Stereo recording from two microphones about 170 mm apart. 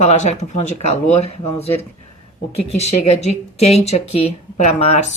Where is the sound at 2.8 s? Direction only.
40° left (ahead or behind).